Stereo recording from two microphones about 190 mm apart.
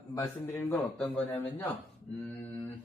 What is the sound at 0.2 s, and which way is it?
Speech, 10° left (ahead or behind).